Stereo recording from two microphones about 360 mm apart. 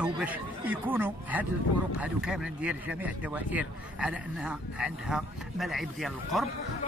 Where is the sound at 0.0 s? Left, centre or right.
Centre.